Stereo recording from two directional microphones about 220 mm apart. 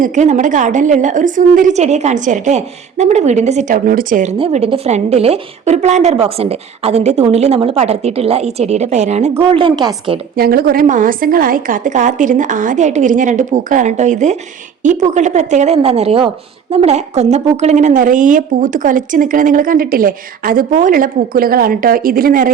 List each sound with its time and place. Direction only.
0.0 s a woman's voice: 35° right (ahead or behind)
10.3 s a woman's voice: 45° right (ahead or behind)